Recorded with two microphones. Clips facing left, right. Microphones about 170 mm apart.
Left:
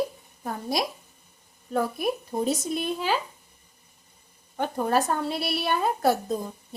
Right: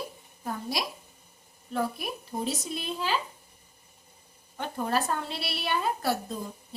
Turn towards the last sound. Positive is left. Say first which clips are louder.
# left 6 dB
turn(degrees=45)  # may be behind; listen again after turning